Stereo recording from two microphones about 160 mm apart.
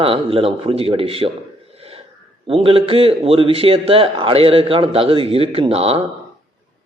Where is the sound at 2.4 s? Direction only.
35° right (ahead or behind).